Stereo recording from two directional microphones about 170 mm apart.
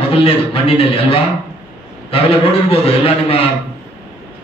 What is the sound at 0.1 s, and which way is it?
A man's voice, 35° left (ahead or behind).